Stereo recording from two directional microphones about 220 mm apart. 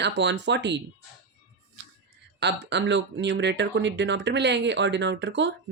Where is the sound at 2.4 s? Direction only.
50° right (ahead or behind).